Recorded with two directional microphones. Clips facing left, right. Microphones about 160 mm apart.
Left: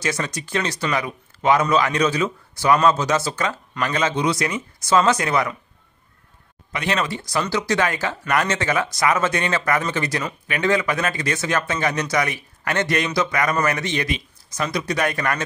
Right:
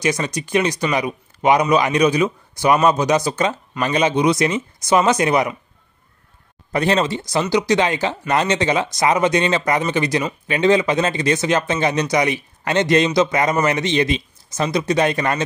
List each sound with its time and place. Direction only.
0.0 s speech: 15° right (ahead or behind)
6.7 s speech: 35° right (ahead or behind)